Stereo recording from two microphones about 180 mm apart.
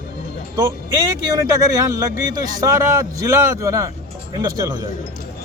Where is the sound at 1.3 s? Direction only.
20° right (ahead or behind).